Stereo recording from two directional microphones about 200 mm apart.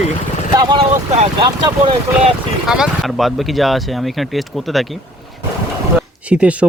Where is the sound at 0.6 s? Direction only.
20° right (ahead or behind).